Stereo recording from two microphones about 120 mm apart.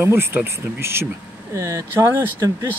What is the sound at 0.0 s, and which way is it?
Speech, 20° right (ahead or behind).